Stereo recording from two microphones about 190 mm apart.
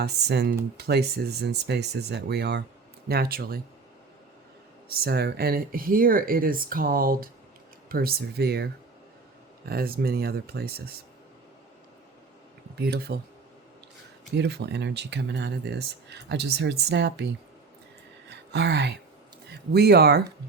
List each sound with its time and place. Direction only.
0.0 s speech: 60° right (ahead or behind)
4.9 s speech: 55° right (ahead or behind)
9.6 s speech: 50° right (ahead or behind)
12.7 s speech: 55° right (ahead or behind)
14.3 s speech: 65° right (ahead or behind)
18.3 s speech: 60° right (ahead or behind)